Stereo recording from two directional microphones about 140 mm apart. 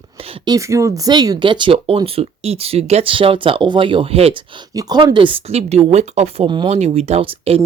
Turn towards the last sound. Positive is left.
turn(degrees=-45)  # may be behind; listen again after turning